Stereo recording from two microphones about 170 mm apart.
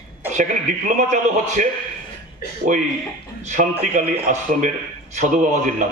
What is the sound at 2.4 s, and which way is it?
Speech, 65° left (ahead or behind).